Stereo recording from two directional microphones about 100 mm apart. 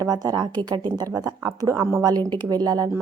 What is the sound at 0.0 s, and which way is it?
Speech, 40° right (ahead or behind).